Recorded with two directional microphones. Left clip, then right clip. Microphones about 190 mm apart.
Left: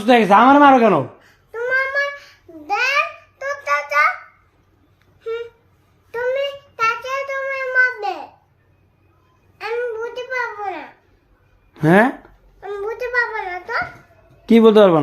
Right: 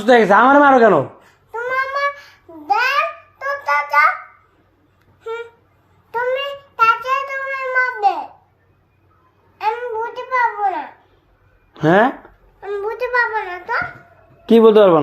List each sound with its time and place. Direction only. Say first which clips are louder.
0.0 s speech: right 1 dB; 35° left (ahead or behind)
1.2 s babbling: even; 20° right (ahead or behind)
3.3 s child singing: right 2 dB; 5° right (ahead or behind)
5.2 s a sound: left 1 dB; 15° right (ahead or behind)
9.6 s a sound: right 3 dB; 10° right (ahead or behind)
11.7 s speech: right 1 dB; 50° left (ahead or behind)
12.5 s babbling: right 3 dB; centre (ahead or behind)
14.4 s a man's voice: right 1 dB; 40° left (ahead or behind)